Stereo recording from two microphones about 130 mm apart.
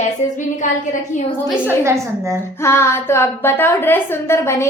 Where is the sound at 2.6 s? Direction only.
20° left (ahead or behind).